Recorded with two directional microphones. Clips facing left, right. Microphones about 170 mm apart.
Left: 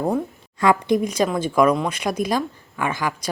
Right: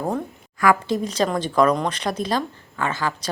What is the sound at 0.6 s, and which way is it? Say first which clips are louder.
A woman's voice: left 2 dB; 20° left (ahead or behind).